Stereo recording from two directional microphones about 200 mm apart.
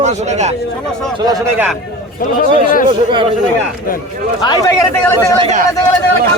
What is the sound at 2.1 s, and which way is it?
Speech, 45° left (ahead or behind).